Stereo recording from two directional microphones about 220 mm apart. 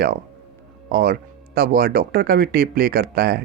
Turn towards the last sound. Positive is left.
turn(degrees=-45)  # may be behind; listen again after turning